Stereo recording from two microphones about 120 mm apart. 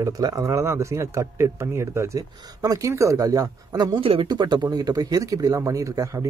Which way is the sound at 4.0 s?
50° right (ahead or behind).